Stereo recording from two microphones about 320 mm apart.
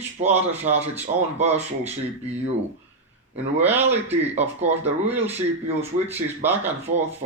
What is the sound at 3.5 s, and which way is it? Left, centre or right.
Speech, centre.